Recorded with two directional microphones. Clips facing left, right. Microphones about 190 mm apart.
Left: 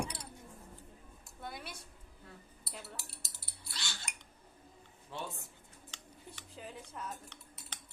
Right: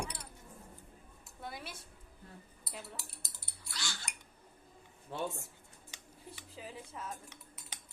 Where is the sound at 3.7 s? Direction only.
25° left (ahead or behind).